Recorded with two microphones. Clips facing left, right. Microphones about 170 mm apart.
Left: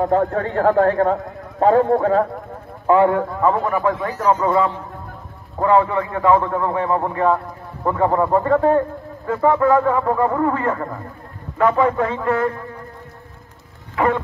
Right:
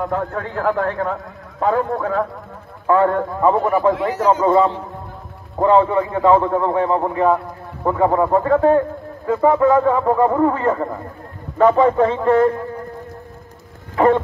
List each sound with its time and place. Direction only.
0.0 s a man's voice: 40° left (ahead or behind)
2.9 s a man's voice: 15° left (ahead or behind)
3.2 s speech: centre (ahead or behind)
4.5 s a man's voice: 25° right (ahead or behind)
13.9 s a sound: 30° right (ahead or behind)